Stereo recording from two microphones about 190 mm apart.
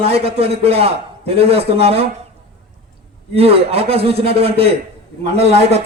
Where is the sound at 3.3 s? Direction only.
30° right (ahead or behind).